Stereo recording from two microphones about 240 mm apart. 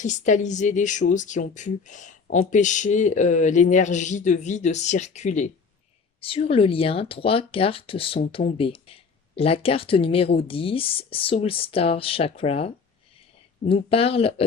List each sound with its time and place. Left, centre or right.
0.0 s speech: left